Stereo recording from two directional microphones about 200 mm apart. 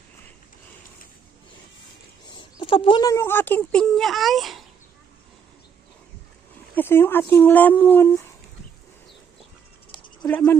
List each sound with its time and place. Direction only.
2.2 s speech: 25° left (ahead or behind); by 4.6 s centre (ahead or behind)
6.7 s speech: 10° left (ahead or behind)
9.9 s bird: 20° left (ahead or behind)
10.2 s speech: 10° left (ahead or behind)